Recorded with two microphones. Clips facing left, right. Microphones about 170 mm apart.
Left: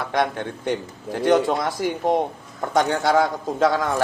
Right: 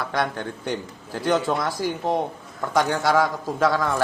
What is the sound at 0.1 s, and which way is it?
A man's voice, 20° left (ahead or behind).